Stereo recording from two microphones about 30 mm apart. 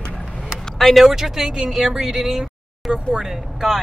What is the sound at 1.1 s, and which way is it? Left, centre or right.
Speech, centre.